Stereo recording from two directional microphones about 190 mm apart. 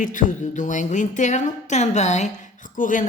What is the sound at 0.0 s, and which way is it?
A woman's voice, 45° left (ahead or behind).